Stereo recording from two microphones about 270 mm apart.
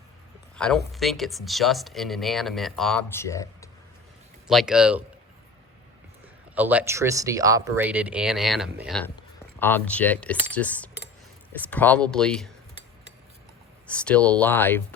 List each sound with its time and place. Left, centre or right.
0.5 s speech: centre
4.4 s speech: centre
6.5 s speech: centre
13.8 s speech: centre